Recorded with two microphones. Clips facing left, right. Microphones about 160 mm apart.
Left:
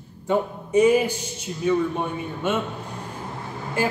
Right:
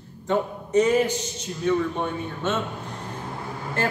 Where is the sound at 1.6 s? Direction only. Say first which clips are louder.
Left 1 dB; 10° left (ahead or behind).